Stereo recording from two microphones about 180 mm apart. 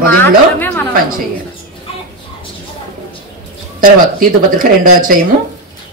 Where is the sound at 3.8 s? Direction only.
50° right (ahead or behind).